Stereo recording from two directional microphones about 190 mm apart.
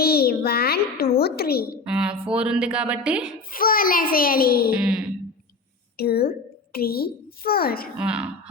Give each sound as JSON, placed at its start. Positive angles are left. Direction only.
{"t": 0.0, "sound": "a sound", "side_deg": 55}
{"t": 1.1, "sound": "a woman's voice", "side_deg": 55}
{"t": 1.8, "sound": "a woman's voice", "side_deg": -5}
{"t": 3.5, "sound": "a child's voice", "side_deg": 50}
{"t": 4.7, "sound": "a woman's voice", "side_deg": -5}
{"t": 6.0, "sound": "a woman's voice", "side_deg": 55}
{"t": 7.9, "sound": "a woman's voice", "side_deg": -5}